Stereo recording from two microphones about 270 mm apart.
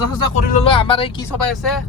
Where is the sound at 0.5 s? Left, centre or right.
Centre.